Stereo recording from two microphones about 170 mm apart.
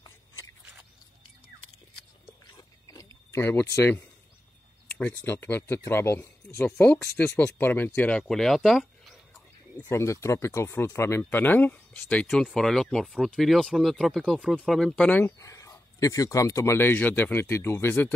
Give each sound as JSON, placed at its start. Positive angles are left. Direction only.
{"t": 2.9, "sound": "a sound", "side_deg": 15}
{"t": 3.7, "sound": "speech", "side_deg": 15}
{"t": 9.8, "sound": "speech", "side_deg": 15}